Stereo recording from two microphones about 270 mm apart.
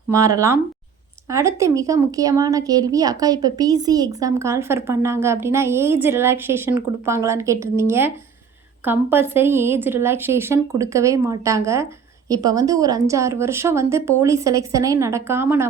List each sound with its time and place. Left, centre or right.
0.1 s a woman's voice: centre